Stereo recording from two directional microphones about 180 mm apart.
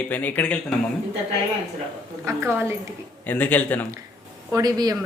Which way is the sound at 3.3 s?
10° left (ahead or behind).